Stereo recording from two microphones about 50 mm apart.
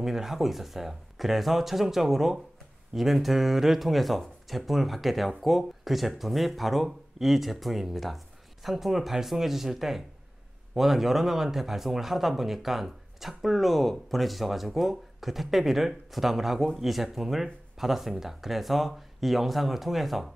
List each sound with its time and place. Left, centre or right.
0.0 s speech: centre